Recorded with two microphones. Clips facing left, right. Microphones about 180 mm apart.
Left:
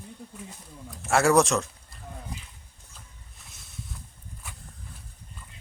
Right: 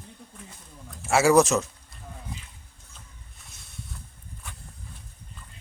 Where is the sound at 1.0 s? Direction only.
Centre (ahead or behind).